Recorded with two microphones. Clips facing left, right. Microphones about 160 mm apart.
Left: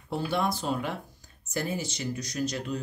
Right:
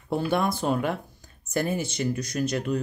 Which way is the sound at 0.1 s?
55° right (ahead or behind).